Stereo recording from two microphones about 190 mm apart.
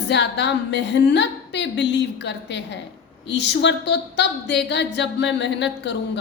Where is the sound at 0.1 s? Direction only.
65° left (ahead or behind).